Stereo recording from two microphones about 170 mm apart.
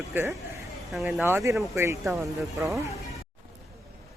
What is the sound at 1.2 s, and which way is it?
Speech, 15° right (ahead or behind).